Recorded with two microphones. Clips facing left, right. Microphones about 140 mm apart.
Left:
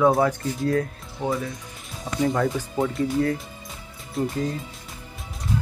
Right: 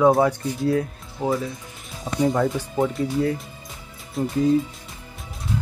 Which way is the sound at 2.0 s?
20° right (ahead or behind).